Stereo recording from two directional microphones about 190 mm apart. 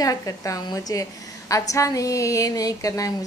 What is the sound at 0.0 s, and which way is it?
A woman's voice, 20° left (ahead or behind).